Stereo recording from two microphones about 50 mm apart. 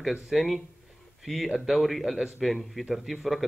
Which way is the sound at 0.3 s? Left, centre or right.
Centre.